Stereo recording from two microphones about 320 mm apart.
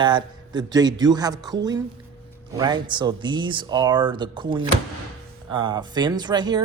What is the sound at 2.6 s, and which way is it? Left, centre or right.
Speech, centre.